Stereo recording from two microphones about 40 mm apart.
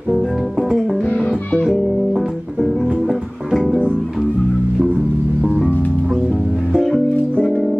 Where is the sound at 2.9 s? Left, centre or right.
Right.